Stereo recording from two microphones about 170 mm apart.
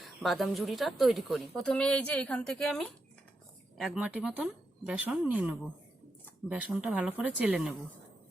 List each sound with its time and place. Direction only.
0.0 s speech: centre (ahead or behind)